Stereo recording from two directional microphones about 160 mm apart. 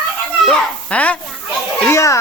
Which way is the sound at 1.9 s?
20° left (ahead or behind).